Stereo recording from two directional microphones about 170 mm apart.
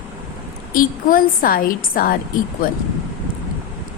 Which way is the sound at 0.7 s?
55° left (ahead or behind).